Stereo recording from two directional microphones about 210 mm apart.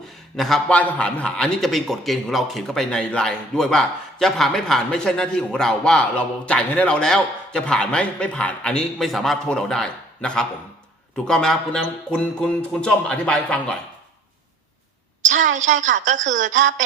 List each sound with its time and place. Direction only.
0.3 s a man's voice: centre (ahead or behind)
15.2 s a woman's voice: 35° right (ahead or behind)